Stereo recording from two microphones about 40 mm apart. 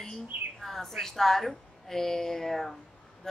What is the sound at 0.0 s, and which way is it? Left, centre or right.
Speech, centre.